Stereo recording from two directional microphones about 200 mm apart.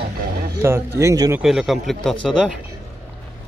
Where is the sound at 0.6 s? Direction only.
15° right (ahead or behind).